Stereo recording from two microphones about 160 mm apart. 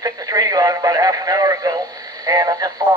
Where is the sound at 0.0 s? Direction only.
25° right (ahead or behind).